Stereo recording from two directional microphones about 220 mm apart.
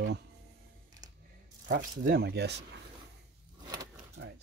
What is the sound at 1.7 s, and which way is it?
Speech, 40° right (ahead or behind).